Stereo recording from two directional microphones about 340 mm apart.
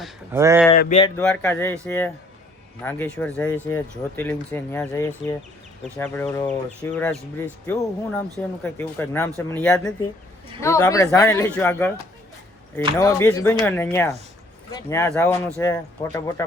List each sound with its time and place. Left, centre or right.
0.0 s speech: centre
0.8 s speech: centre
1.2 s speech: centre
13.0 s speech: centre